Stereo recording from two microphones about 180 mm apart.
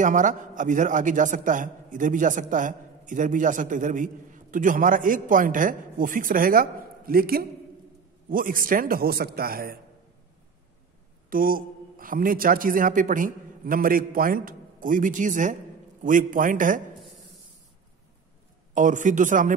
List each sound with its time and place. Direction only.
0.0 s a man's voice: 45° right (ahead or behind)
11.2 s a man's voice: 50° right (ahead or behind)
18.7 s a man's voice: 45° right (ahead or behind)